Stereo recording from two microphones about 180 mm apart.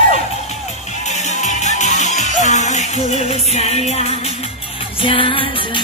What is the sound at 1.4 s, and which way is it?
Music, 40° left (ahead or behind).